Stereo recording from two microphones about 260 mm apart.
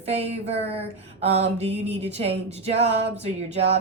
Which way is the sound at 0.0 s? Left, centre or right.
Right.